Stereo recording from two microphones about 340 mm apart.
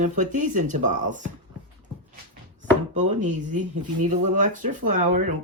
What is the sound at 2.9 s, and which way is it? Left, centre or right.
Speech, right.